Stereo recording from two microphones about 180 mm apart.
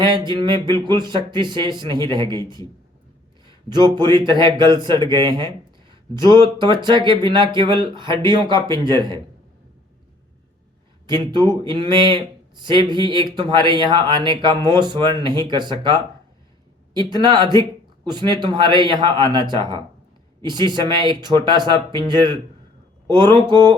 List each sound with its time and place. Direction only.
0.0 s speech: 25° right (ahead or behind)
2.2 s a man's voice: 20° left (ahead or behind)
3.4 s speech: 25° right (ahead or behind)
11.1 s speech: 25° right (ahead or behind)